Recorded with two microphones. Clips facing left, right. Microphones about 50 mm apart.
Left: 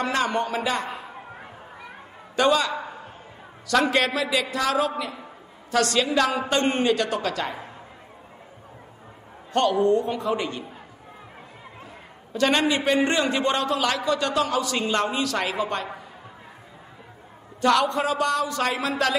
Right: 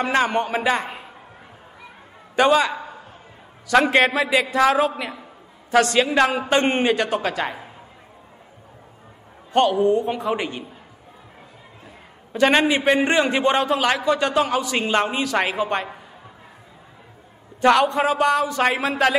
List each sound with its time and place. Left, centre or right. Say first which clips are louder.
0.0 s a man's voice: right 4 dB; right
2.3 s a man's voice: right 4 dB; right
9.5 s a man's voice: right 3 dB; right
12.3 s a man's voice: right 4 dB; right
17.6 s a man's voice: right 4 dB; right